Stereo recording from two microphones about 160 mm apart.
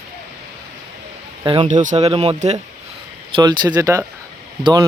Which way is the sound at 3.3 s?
25° right (ahead or behind).